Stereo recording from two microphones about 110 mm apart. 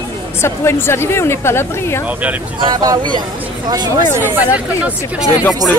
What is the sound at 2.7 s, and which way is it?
Speech, 40° right (ahead or behind).